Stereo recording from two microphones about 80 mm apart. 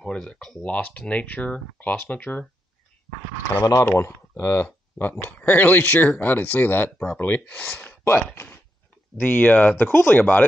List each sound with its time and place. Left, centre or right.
0.0 s speech: centre
3.8 s speech: left
7.8 s a sound: left
9.1 s speech: left